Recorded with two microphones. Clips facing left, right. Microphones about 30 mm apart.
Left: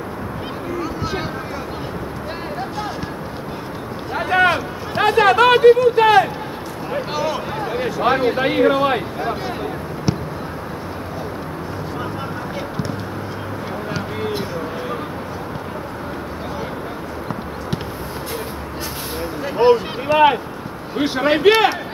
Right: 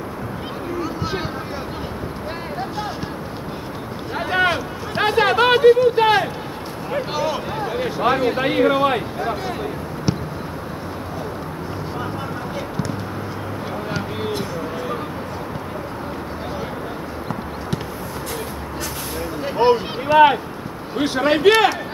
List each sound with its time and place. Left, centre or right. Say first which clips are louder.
4.1 s speech: left 3 dB; centre
19.4 s a sound: left 2 dB; centre
20.9 s speech: left 1 dB; centre
21.5 s speech: even; centre